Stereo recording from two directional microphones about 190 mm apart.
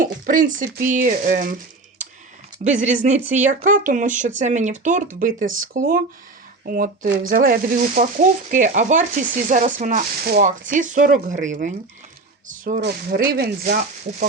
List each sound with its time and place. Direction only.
0.0 s speech: 45° right (ahead or behind)
2.6 s speech: 40° right (ahead or behind)
12.8 s speech: 55° right (ahead or behind)